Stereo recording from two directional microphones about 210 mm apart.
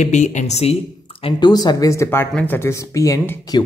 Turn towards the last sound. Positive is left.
turn(degrees=15)  # may be behind; listen again after turning